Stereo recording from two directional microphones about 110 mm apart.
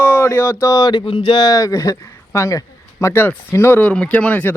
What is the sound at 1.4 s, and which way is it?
A man's voice, 30° left (ahead or behind).